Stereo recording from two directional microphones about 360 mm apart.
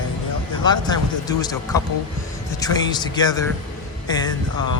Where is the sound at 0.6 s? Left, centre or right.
Centre.